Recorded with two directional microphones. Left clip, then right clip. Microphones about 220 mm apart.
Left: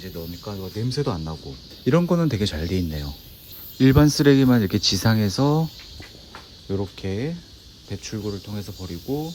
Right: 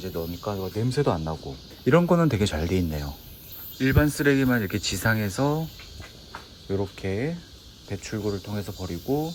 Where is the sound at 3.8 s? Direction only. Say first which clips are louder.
Left 5 dB; 20° left (ahead or behind).